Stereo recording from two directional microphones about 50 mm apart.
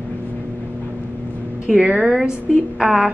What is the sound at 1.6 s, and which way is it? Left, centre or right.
Speech, right.